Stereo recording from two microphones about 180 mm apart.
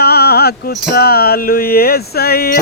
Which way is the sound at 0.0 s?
60° left (ahead or behind).